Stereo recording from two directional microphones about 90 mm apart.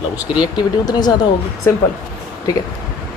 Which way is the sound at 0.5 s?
50° left (ahead or behind).